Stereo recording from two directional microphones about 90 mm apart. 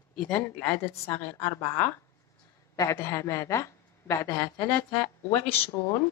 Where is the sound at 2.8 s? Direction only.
35° left (ahead or behind).